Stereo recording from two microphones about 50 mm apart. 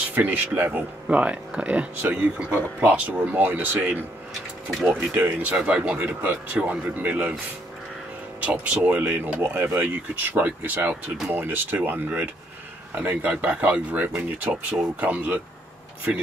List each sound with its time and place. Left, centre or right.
0.1 s speech: right
1.0 s speech: right
5.4 s speech: right
5.9 s speech: right
6.5 s speech: right
8.4 s speech: right
12.9 s speech: right